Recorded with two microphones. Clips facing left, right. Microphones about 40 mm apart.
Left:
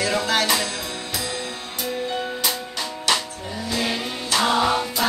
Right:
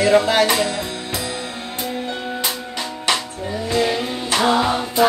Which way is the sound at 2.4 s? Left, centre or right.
Right.